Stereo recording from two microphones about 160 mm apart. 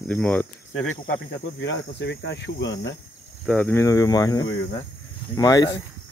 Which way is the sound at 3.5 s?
10° left (ahead or behind).